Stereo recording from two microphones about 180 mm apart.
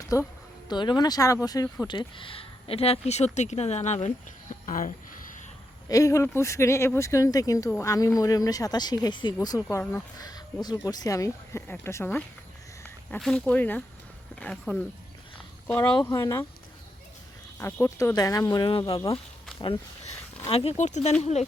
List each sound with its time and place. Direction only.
0.0 s speech: 20° left (ahead or behind); by 4.9 s 45° left (ahead or behind)
5.9 s speech: 15° left (ahead or behind)
17.6 s speech: 15° left (ahead or behind)
20.5 s speech: 35° left (ahead or behind)